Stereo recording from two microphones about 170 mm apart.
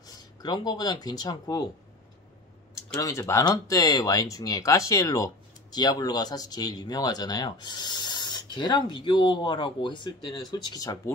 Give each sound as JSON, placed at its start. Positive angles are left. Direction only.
{"t": 0.0, "sound": "speech", "side_deg": 25}
{"t": 2.9, "sound": "speech", "side_deg": 20}